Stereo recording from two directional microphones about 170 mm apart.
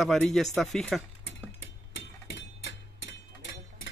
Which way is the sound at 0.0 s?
Centre (ahead or behind).